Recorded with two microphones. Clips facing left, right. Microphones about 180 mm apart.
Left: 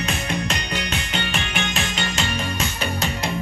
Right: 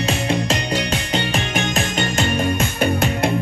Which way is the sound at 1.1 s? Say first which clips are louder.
Right 6 dB; 45° right (ahead or behind).